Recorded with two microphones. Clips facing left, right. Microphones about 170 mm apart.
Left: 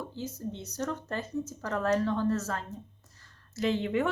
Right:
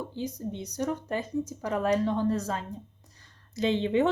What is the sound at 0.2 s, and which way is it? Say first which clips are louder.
A woman's voice: right 4 dB; 15° right (ahead or behind).